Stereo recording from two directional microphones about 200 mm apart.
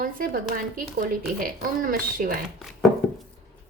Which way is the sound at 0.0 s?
45° right (ahead or behind).